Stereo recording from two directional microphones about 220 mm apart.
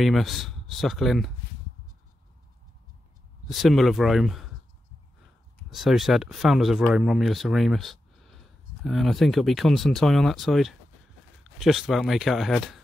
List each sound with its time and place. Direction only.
0.0 s speech: centre (ahead or behind)
3.4 s speech: centre (ahead or behind)
5.7 s speech: centre (ahead or behind)